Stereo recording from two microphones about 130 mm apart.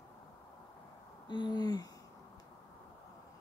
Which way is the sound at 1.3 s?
35° left (ahead or behind).